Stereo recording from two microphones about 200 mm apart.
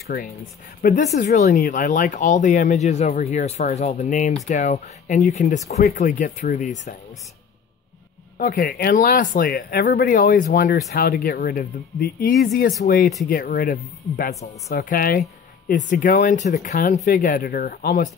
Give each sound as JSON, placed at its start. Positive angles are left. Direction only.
{"t": 0.8, "sound": "speech", "side_deg": 40}
{"t": 8.4, "sound": "speech", "side_deg": 40}